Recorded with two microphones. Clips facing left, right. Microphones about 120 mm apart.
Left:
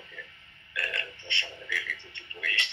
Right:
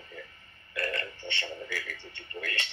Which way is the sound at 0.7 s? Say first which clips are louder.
Right 4 dB; 35° right (ahead or behind).